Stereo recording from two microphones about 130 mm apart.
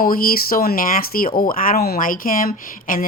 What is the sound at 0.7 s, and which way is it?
Speech, 90° left.